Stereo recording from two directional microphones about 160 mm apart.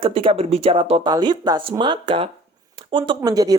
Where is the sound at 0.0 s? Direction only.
35° right (ahead or behind).